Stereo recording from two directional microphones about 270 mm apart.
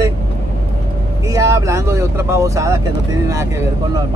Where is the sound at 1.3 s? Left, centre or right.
Centre.